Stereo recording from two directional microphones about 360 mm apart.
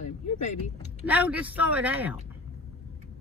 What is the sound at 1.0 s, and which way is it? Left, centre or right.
Speech, centre.